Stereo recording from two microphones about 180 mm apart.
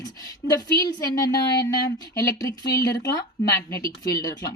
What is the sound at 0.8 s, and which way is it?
A woman's voice, 20° left (ahead or behind).